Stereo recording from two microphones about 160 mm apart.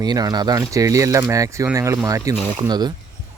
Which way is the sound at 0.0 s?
25° right (ahead or behind).